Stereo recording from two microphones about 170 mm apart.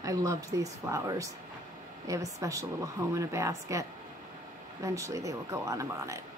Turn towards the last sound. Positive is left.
turn(degrees=-20)  # may be behind; listen again after turning